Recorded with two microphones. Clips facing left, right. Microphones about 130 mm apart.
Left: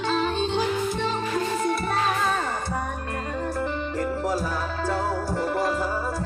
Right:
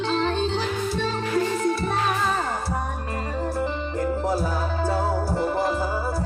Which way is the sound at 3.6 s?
Centre (ahead or behind).